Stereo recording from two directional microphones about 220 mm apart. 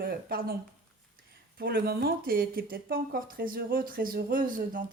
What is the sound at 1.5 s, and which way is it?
Speech, 45° right (ahead or behind).